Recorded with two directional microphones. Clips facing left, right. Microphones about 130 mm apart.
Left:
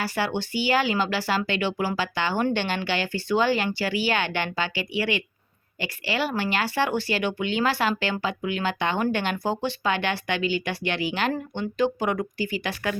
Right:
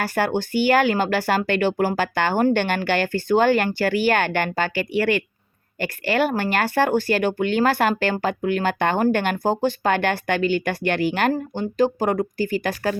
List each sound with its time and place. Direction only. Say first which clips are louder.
0.0 s speech: right 5 dB; 50° right (ahead or behind)
11.3 s speech: right 4 dB; 40° right (ahead or behind)